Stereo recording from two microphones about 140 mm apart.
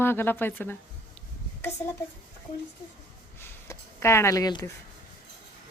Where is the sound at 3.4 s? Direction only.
20° left (ahead or behind).